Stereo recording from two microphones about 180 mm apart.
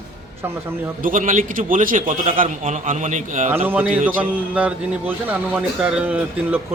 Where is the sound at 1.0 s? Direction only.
45° right (ahead or behind).